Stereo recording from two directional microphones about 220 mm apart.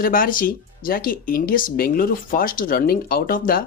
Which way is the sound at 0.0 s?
40° left (ahead or behind).